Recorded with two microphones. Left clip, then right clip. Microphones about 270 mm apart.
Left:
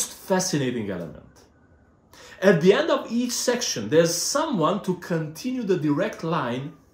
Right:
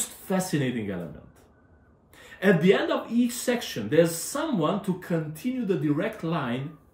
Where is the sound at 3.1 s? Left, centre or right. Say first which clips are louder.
Left 2 dB; centre.